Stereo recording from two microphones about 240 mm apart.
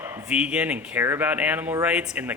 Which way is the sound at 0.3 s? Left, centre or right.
Centre.